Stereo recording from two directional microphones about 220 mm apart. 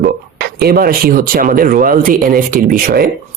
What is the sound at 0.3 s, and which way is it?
Speech, 45° right (ahead or behind).